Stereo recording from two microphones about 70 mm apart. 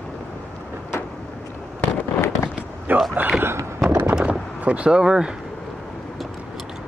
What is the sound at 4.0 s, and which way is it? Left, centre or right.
Vehicle, centre.